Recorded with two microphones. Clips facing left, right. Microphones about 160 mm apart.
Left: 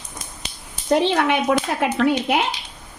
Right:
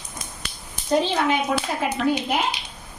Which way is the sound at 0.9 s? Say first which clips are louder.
Left 3 dB; 70° left (ahead or behind).